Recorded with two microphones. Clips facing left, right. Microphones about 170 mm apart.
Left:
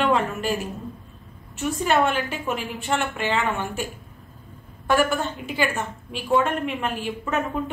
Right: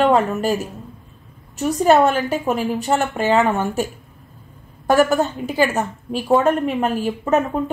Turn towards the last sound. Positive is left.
turn(degrees=-40)  # may be behind; listen again after turning